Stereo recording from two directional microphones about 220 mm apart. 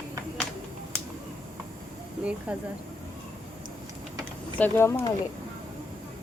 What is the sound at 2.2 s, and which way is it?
Speech, 5° right (ahead or behind).